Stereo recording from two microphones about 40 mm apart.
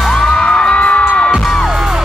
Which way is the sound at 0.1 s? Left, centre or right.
Centre.